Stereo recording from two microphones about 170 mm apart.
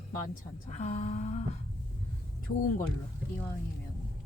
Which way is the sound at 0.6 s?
40° left (ahead or behind).